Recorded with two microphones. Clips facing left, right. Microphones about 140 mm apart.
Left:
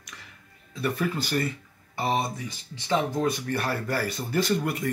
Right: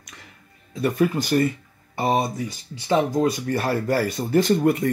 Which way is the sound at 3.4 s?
40° right (ahead or behind).